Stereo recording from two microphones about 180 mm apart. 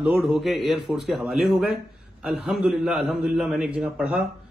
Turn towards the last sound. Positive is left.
turn(degrees=0)  # may be behind; listen again after turning